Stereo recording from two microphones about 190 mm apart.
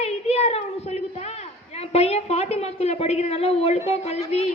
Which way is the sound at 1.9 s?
35° left (ahead or behind).